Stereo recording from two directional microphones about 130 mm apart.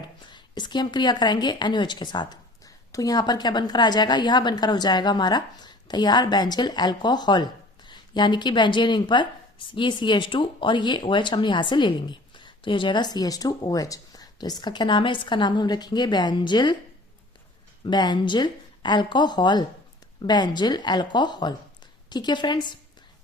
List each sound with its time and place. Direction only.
0.3 s a woman's voice: 35° left (ahead or behind)
17.8 s a woman's voice: 35° left (ahead or behind)